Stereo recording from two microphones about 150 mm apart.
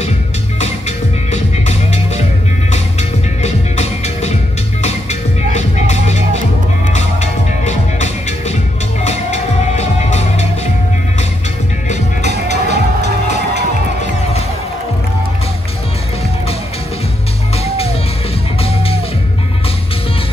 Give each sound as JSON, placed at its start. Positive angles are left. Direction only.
{"t": 0.6, "sound": "music", "side_deg": 50}
{"t": 5.5, "sound": "music", "side_deg": 50}
{"t": 12.4, "sound": "music", "side_deg": -90}